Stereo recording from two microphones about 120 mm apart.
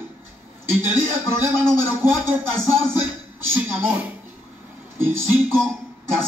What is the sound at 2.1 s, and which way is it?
Music, 20° right (ahead or behind).